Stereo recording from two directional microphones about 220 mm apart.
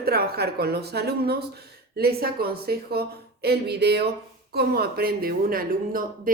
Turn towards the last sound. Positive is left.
turn(degrees=-40)  # may be behind; listen again after turning